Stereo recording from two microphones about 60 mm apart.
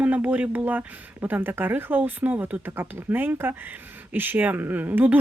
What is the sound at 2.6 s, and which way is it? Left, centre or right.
Speech, right.